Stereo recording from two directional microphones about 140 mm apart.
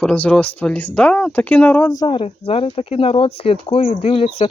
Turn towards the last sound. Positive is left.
turn(degrees=45)  # may be behind; listen again after turning